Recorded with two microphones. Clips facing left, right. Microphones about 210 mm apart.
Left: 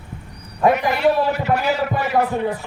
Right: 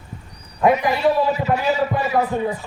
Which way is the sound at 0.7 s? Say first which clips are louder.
Even; 70° left (ahead or behind).